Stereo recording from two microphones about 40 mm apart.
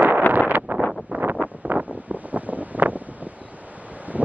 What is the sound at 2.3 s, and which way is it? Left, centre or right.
Wind noise, right.